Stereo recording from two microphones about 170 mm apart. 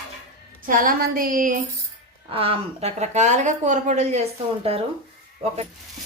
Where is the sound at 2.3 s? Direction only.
35° right (ahead or behind).